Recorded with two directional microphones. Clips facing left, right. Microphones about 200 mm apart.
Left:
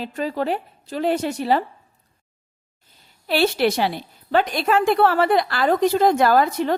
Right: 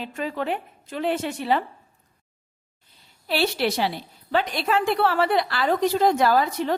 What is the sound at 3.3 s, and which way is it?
A woman's voice, 55° left (ahead or behind).